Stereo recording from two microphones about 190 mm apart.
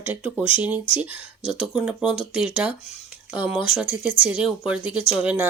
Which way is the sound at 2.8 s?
35° left (ahead or behind).